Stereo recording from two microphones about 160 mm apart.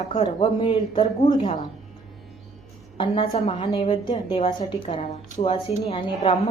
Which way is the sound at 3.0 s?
40° left (ahead or behind).